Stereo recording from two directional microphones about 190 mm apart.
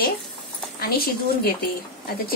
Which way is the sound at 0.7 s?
55° left (ahead or behind).